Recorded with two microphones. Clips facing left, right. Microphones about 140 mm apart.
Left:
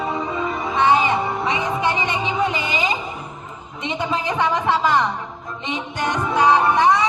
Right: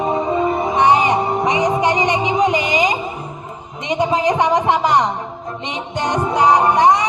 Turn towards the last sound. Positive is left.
turn(degrees=-20)  # may be behind; listen again after turning